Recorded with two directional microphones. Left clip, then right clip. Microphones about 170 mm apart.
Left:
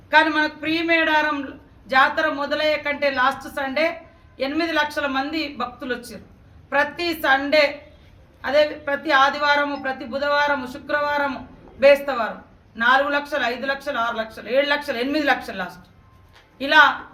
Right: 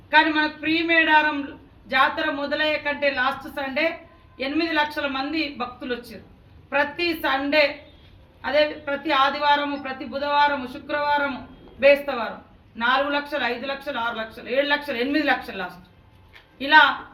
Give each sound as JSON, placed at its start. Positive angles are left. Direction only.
{"t": 0.1, "sound": "a woman's voice", "side_deg": 20}
{"t": 6.7, "sound": "a woman's voice", "side_deg": 20}